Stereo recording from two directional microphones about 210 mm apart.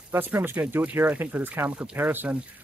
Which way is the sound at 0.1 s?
10° right (ahead or behind).